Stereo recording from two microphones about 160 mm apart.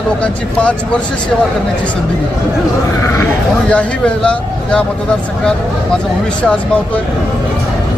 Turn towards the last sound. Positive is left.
turn(degrees=5)  # may be behind; listen again after turning